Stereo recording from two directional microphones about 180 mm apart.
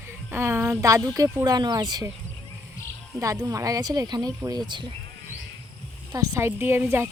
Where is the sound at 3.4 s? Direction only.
20° right (ahead or behind).